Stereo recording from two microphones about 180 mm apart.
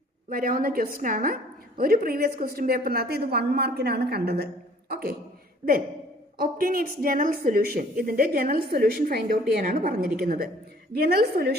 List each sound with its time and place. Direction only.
0.3 s a woman's voice: 50° right (ahead or behind)
6.3 s a woman's voice: 55° right (ahead or behind)